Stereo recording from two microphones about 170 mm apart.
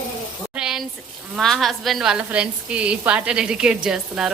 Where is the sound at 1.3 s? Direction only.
Centre (ahead or behind).